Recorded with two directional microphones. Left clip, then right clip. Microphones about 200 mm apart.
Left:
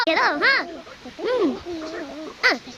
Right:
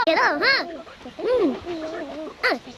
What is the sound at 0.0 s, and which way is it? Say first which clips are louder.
A child's voice: even; 15° left (ahead or behind).